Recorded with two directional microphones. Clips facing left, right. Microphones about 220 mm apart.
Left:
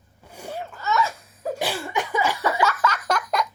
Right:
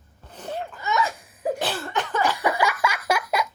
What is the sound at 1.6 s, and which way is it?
Cough, 10° left (ahead or behind).